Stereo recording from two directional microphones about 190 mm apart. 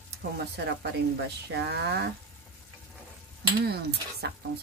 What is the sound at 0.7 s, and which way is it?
Speech, 65° right (ahead or behind).